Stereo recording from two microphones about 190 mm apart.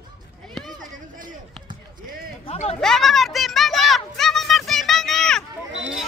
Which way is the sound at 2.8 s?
Centre (ahead or behind).